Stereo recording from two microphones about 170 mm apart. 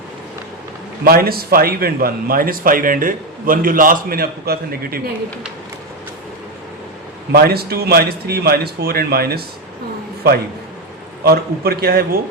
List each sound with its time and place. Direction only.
1.0 s a man's voice: 60° right (ahead or behind)
7.3 s a man's voice: 65° right (ahead or behind)
11.2 s a man's voice: 65° right (ahead or behind)